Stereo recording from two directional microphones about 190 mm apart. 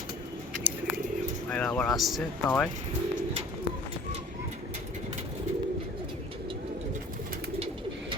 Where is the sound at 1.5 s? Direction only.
5° left (ahead or behind).